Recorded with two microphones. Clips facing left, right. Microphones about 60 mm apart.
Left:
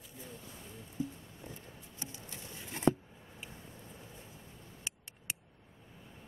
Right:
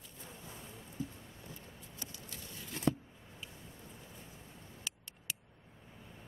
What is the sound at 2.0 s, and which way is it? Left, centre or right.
Patter, left.